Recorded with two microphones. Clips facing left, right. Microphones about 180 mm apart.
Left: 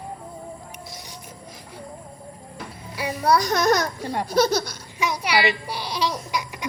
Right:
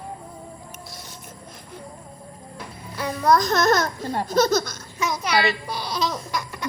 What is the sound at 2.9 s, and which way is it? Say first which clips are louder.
A child's voice: right 1 dB; 10° left (ahead or behind).